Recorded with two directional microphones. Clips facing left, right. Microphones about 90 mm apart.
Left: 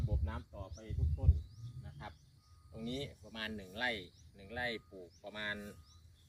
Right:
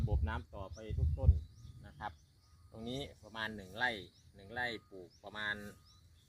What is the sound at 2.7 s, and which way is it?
Speech, 35° right (ahead or behind).